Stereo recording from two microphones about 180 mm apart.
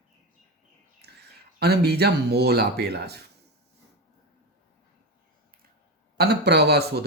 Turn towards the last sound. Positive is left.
turn(degrees=-65)  # may be behind; listen again after turning